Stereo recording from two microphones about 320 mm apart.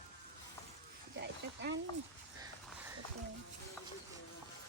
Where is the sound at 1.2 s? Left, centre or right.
Right.